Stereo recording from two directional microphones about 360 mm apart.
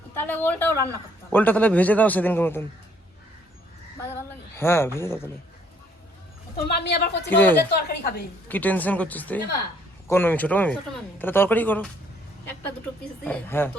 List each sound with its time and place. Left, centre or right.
0.1 s a woman's voice: centre
4.5 s speech: centre
6.7 s a woman's voice: left
7.3 s a man's voice: centre
7.7 s a woman's voice: left
8.4 s a man's voice: centre
13.2 s a man's voice: centre